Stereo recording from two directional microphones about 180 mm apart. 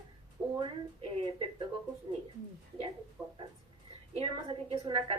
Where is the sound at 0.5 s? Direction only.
30° right (ahead or behind).